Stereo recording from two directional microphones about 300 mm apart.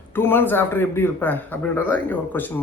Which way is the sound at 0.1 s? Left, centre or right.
Centre.